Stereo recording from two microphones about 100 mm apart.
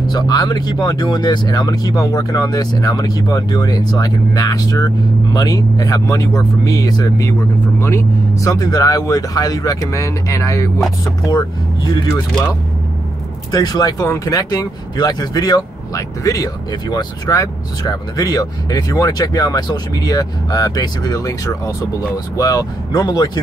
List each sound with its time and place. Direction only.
0.0 s speech: 45° left (ahead or behind)
7.8 s speech: 30° left (ahead or behind)
11.3 s speech: 40° left (ahead or behind)
13.5 s speech: 40° left (ahead or behind)